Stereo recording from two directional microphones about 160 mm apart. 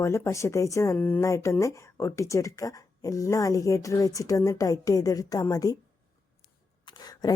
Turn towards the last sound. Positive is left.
turn(degrees=25)  # may be behind; listen again after turning